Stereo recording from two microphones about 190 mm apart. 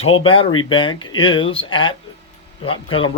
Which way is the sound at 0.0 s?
30° left (ahead or behind).